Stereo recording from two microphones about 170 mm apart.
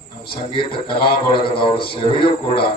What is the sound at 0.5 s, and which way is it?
A man's voice, 30° left (ahead or behind).